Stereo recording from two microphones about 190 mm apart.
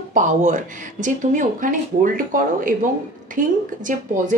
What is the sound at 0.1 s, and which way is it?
A woman's voice, 40° right (ahead or behind).